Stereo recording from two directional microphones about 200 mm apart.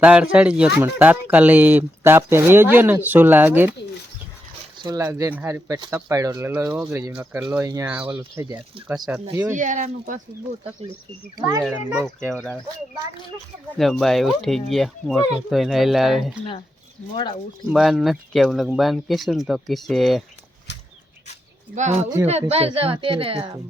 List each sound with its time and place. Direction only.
0.0 s speech: 5° right (ahead or behind)
4.8 s speech: 20° right (ahead or behind)
7.6 s speech: 15° right (ahead or behind)
9.6 s speech: 40° right (ahead or behind)
11.3 s speech: 15° right (ahead or behind)
11.9 s speech: centre (ahead or behind)
13.7 s speech: centre (ahead or behind)
17.7 s speech: 5° right (ahead or behind)
20.7 s a sound: 60° left (ahead or behind)
21.8 s a woman's voice: 35° right (ahead or behind)